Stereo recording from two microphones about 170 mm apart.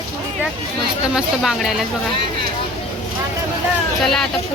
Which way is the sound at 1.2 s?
Centre (ahead or behind).